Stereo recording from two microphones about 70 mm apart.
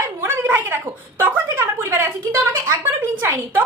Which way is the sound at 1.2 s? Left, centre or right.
Right.